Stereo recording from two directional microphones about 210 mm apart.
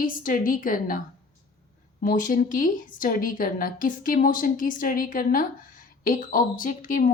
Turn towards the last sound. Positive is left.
turn(degrees=40)  # may be behind; listen again after turning